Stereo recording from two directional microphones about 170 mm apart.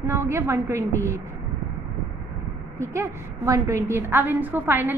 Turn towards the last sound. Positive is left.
turn(degrees=-10)  # may be behind; listen again after turning